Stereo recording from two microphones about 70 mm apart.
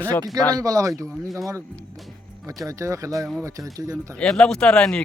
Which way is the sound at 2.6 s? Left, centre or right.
Right.